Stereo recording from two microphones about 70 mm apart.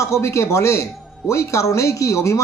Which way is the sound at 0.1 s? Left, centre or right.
Left.